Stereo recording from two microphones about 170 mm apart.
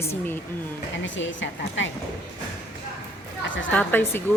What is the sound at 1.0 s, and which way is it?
Speech, 90° left.